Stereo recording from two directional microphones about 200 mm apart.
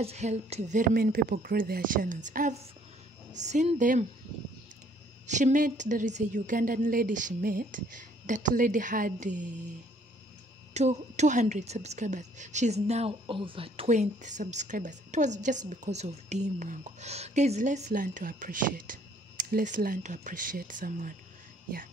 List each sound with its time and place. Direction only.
0.0 s a woman's voice: 35° right (ahead or behind)
5.2 s a woman's voice: 35° right (ahead or behind)
10.7 s a woman's voice: 35° right (ahead or behind)